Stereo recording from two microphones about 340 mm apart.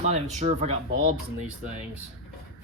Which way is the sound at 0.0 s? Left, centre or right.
Right.